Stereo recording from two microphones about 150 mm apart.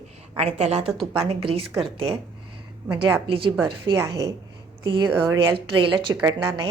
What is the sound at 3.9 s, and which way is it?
A woman's voice, 20° right (ahead or behind).